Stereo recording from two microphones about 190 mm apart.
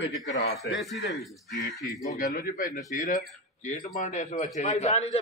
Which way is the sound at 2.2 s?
55° left (ahead or behind).